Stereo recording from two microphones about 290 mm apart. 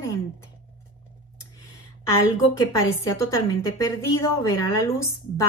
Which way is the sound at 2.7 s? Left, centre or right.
Centre.